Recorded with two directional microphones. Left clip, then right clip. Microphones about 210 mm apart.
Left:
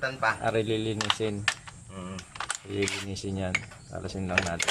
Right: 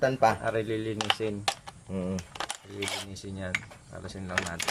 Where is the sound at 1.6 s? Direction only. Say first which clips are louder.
Right 6 dB; 30° right (ahead or behind).